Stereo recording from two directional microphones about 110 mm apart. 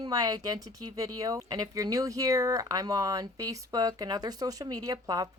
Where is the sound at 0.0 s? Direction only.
35° right (ahead or behind).